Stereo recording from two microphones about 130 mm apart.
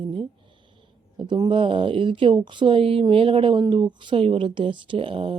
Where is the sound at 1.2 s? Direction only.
40° right (ahead or behind).